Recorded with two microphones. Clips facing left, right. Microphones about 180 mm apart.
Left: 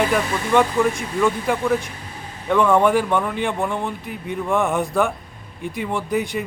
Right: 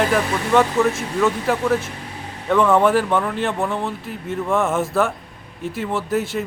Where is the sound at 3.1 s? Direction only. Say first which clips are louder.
Right 1 dB; 5° left (ahead or behind).